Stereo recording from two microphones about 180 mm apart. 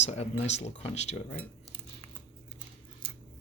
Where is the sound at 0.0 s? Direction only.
35° left (ahead or behind).